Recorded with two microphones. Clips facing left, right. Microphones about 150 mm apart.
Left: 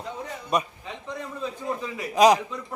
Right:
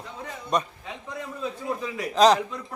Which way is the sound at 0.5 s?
10° left (ahead or behind).